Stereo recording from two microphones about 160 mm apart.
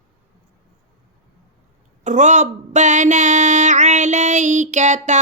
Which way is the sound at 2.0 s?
50° right (ahead or behind).